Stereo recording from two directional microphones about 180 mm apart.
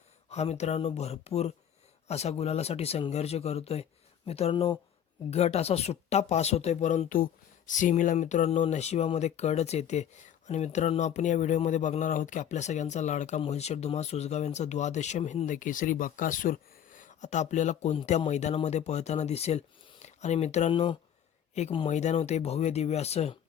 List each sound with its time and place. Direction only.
0.3 s speech: 35° left (ahead or behind)